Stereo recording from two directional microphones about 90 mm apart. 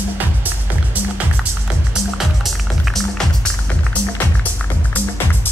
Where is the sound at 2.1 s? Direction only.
Centre (ahead or behind).